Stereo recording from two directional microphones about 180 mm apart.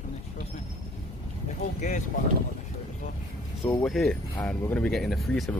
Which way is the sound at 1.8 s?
45° left (ahead or behind).